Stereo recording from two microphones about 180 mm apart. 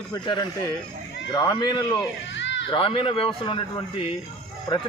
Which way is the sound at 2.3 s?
90° left.